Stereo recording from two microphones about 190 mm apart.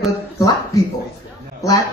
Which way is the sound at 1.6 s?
15° left (ahead or behind).